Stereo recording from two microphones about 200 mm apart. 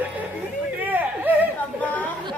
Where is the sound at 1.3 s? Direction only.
10° right (ahead or behind).